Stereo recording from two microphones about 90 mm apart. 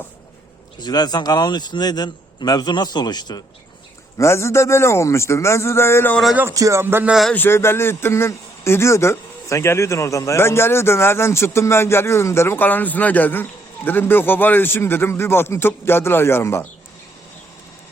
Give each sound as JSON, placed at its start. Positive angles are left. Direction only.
{"t": 0.8, "sound": "a man's voice", "side_deg": 50}
{"t": 4.2, "sound": "a man's voice", "side_deg": 30}
{"t": 6.5, "sound": "speech", "side_deg": -35}
{"t": 6.8, "sound": "speech", "side_deg": -25}
{"t": 7.3, "sound": "speech", "side_deg": 25}